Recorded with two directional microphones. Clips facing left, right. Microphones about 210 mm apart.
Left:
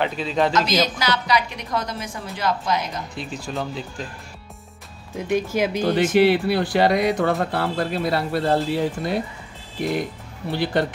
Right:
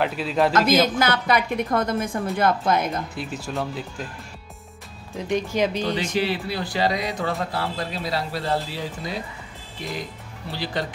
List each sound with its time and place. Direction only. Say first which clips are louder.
0.0 s speech: even; 5° right (ahead or behind)
0.5 s a woman's voice: right 2 dB; 55° right (ahead or behind)
3.2 s speech: even; 5° right (ahead or behind)
5.1 s speech: left 2 dB; 5° left (ahead or behind)
6.1 s speech: left 8 dB; 65° left (ahead or behind)